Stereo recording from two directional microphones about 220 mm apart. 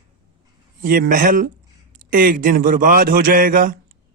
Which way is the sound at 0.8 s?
40° right (ahead or behind).